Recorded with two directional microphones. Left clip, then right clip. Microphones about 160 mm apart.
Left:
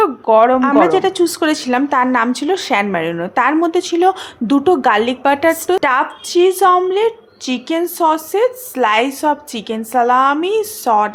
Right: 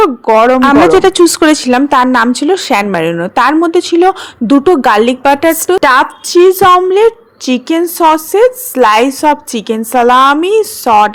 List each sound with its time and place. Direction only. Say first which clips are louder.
0.0 s a woman's voice: right 4 dB; 30° right (ahead or behind)